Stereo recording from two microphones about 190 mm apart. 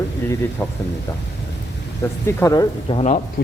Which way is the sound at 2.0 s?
15° left (ahead or behind).